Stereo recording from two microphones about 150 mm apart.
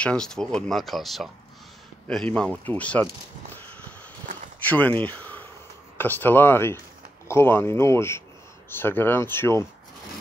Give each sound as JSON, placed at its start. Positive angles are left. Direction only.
{"t": 0.0, "sound": "speech", "side_deg": 5}
{"t": 4.6, "sound": "speech", "side_deg": 10}